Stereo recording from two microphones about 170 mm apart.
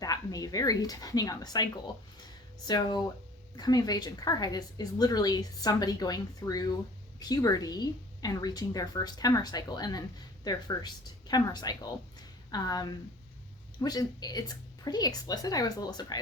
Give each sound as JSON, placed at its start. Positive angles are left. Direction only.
{"t": 0.0, "sound": "a woman's voice", "side_deg": 20}
{"t": 2.6, "sound": "a woman's voice", "side_deg": 25}